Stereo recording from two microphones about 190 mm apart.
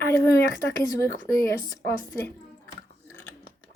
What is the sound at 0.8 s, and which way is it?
Speech, 15° left (ahead or behind).